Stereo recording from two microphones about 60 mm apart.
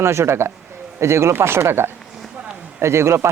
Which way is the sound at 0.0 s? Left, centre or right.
Right.